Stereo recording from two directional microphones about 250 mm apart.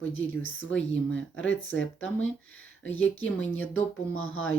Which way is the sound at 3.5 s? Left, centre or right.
Left.